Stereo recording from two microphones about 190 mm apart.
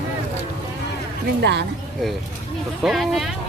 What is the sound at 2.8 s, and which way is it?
Speech, centre (ahead or behind).